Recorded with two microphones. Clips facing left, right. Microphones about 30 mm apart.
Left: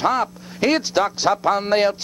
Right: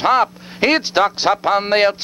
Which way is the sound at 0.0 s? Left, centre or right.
Right.